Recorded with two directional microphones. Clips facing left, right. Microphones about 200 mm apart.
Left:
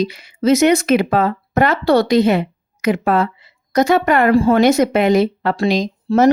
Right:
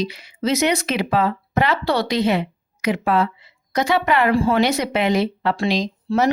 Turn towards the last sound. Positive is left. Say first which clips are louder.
# left 6 dB
turn(degrees=45)  # may be behind; listen again after turning